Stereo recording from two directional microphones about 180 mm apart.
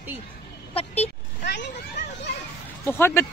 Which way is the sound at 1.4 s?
75° left (ahead or behind).